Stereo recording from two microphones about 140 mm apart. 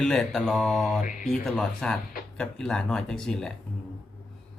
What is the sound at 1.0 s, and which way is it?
Speech, 70° left (ahead or behind).